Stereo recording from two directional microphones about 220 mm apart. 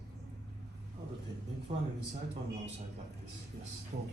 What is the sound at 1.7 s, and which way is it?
Speech, 25° right (ahead or behind).